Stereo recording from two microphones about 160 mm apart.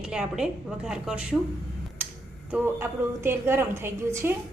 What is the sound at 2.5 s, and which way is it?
Speech, 15° right (ahead or behind).